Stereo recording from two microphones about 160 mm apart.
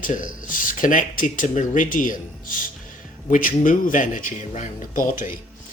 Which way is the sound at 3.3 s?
60° left (ahead or behind).